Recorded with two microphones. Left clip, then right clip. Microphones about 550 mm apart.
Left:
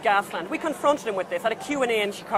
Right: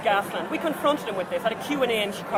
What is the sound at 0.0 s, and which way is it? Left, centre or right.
Speech, left.